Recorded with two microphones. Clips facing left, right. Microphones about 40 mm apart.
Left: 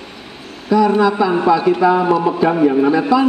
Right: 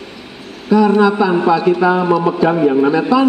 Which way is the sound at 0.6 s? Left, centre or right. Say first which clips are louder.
Right 1 dB; right.